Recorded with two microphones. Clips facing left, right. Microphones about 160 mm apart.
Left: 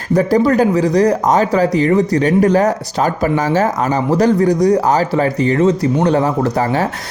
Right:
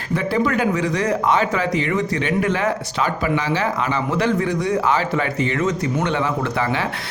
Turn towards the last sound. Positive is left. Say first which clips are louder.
# left 6 dB
turn(degrees=40)  # may be behind; listen again after turning